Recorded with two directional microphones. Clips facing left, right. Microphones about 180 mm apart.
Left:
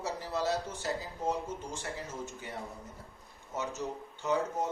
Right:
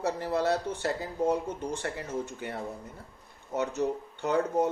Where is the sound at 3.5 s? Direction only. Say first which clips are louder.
Right 7 dB; 60° right (ahead or behind).